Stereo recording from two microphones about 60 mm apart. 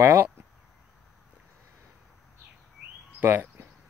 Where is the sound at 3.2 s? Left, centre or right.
Right.